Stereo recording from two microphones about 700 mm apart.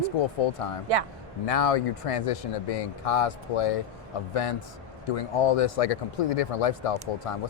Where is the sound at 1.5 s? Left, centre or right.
Left.